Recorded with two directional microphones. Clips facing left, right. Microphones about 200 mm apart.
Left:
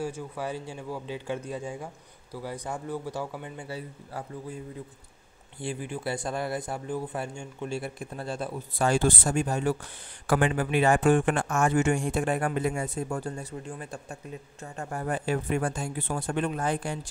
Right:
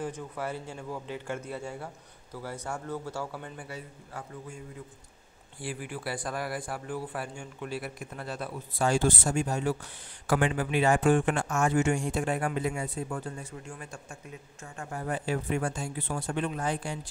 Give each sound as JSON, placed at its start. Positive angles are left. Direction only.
{"t": 0.0, "sound": "speech", "side_deg": 10}
{"t": 3.6, "sound": "a man's voice", "side_deg": 35}
{"t": 5.6, "sound": "a man's voice", "side_deg": 25}
{"t": 8.7, "sound": "a man's voice", "side_deg": 60}